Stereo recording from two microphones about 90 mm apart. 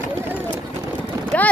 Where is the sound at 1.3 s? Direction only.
15° left (ahead or behind).